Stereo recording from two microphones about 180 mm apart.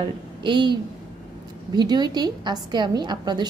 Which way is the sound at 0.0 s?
25° right (ahead or behind).